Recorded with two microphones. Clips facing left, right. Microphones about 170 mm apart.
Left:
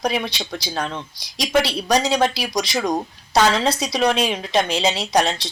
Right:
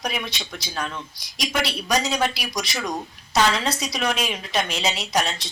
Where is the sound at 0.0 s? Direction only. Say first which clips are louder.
Left 6 dB; 30° left (ahead or behind).